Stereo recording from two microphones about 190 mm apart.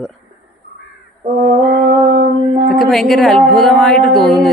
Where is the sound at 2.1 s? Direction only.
40° right (ahead or behind).